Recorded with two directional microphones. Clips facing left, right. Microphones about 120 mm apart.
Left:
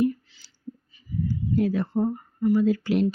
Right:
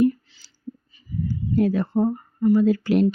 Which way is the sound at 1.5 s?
50° right (ahead or behind).